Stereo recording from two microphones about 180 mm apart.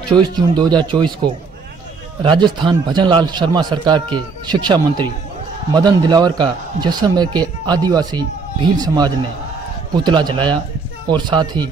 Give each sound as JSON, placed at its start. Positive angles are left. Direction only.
{"t": 0.6, "sound": "a man's voice", "side_deg": -25}